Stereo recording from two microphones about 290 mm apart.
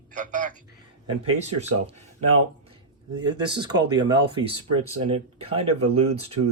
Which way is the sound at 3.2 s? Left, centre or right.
Centre.